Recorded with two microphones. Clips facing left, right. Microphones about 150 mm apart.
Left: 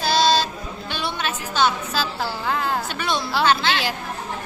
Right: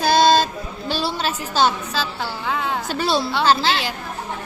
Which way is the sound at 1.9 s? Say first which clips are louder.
Even; 5° left (ahead or behind).